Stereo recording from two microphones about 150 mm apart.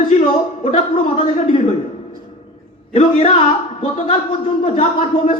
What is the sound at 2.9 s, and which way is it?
Speech, 45° left (ahead or behind).